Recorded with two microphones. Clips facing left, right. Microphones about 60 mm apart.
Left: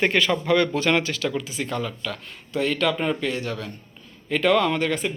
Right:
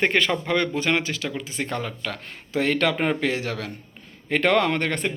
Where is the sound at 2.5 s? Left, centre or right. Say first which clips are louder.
Right 1 dB; right.